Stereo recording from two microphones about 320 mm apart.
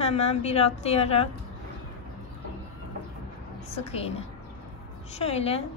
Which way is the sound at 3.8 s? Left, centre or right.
Centre.